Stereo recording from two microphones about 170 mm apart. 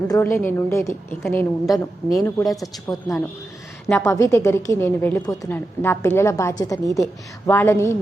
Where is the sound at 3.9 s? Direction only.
15° left (ahead or behind).